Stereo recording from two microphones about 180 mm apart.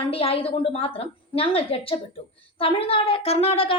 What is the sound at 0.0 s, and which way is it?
A woman's voice, 30° left (ahead or behind).